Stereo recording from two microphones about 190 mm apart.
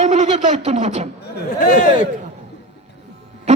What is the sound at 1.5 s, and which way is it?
Speech, 40° left (ahead or behind).